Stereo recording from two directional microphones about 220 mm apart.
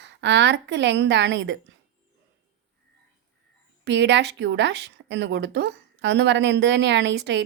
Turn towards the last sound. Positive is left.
turn(degrees=-50)  # may be behind; listen again after turning